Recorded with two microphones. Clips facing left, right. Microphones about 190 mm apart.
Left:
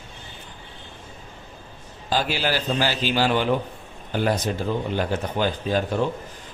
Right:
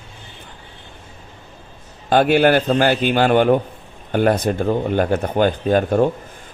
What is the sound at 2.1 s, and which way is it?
A man's voice, 60° right (ahead or behind).